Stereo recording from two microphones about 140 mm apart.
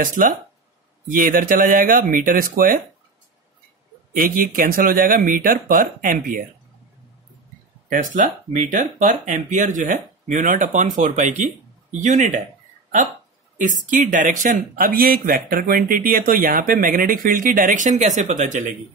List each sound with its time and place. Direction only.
0.0 s speech: 75° right (ahead or behind)
4.1 s speech: 90° right
7.9 s speech: 65° right (ahead or behind)
14.1 s speech: 65° right (ahead or behind)